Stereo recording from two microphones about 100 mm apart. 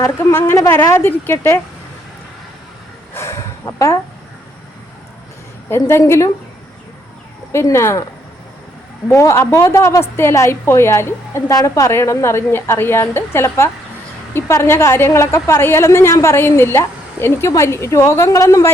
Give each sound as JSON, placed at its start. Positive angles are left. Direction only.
{"t": 0.0, "sound": "a woman's voice", "side_deg": 25}
{"t": 3.2, "sound": "a sound", "side_deg": 30}
{"t": 5.6, "sound": "a woman's voice", "side_deg": 25}
{"t": 7.5, "sound": "a woman's voice", "side_deg": 25}
{"t": 9.0, "sound": "a woman's voice", "side_deg": 30}